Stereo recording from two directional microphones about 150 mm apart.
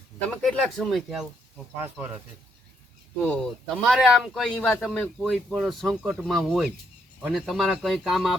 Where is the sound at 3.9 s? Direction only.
Centre (ahead or behind).